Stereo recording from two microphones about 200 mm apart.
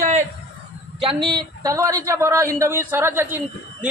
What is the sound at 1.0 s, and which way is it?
A woman's voice, 25° right (ahead or behind).